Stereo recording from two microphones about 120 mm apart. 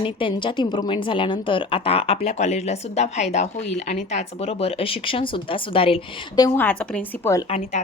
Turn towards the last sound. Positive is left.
turn(degrees=25)  # may be behind; listen again after turning